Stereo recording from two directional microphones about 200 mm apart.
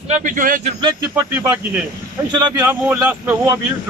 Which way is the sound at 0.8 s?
15° right (ahead or behind).